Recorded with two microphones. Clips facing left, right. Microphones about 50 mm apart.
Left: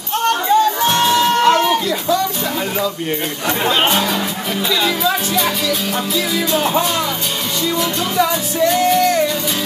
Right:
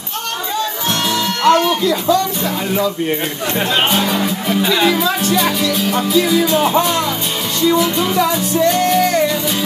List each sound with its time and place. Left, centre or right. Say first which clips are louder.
0.8 s music: left 4 dB; left
1.9 s speech: right 3 dB; centre
3.9 s speech: right 1 dB; centre
4.6 s speech: right 3 dB; centre
5.0 s music: right 2 dB; centre